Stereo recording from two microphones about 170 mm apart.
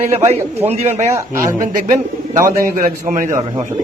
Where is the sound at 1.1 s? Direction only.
15° right (ahead or behind).